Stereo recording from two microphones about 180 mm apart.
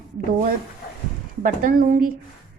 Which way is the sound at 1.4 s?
50° right (ahead or behind).